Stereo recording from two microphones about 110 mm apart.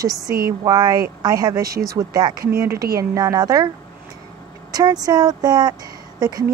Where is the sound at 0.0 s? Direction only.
35° right (ahead or behind).